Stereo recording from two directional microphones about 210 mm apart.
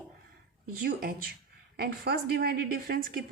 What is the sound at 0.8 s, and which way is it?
Speech, 45° right (ahead or behind).